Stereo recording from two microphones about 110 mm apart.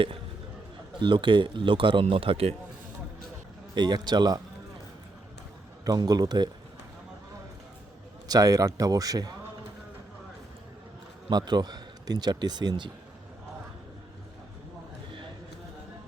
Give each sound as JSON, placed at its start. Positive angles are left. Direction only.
{"t": 0.9, "sound": "a man's voice", "side_deg": -45}
{"t": 3.8, "sound": "a man's voice", "side_deg": -40}
{"t": 5.8, "sound": "a man's voice", "side_deg": -35}
{"t": 8.3, "sound": "a man's voice", "side_deg": -35}
{"t": 11.3, "sound": "a man's voice", "side_deg": -40}